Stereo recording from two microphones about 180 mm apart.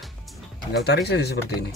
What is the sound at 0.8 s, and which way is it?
Speech, 65° left (ahead or behind).